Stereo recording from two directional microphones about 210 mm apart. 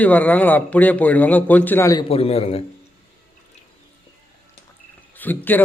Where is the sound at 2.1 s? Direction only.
30° left (ahead or behind).